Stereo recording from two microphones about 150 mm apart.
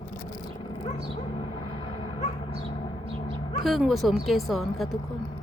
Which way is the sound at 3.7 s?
Centre (ahead or behind).